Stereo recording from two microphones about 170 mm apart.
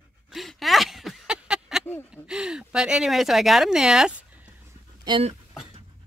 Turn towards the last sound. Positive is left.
turn(degrees=-30)  # may be behind; listen again after turning